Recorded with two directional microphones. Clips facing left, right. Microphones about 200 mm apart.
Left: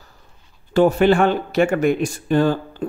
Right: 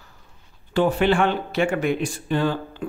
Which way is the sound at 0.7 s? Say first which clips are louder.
Left 5 dB; 45° left (ahead or behind).